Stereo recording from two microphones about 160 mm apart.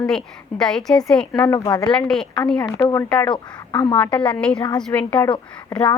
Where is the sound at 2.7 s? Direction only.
15° left (ahead or behind).